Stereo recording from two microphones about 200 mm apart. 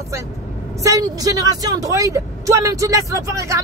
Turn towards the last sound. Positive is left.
turn(degrees=-15)  # may be behind; listen again after turning